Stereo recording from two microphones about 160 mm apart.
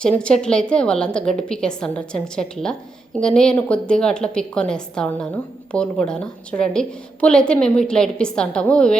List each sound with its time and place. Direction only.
0.0 s a woman's voice: 5° left (ahead or behind)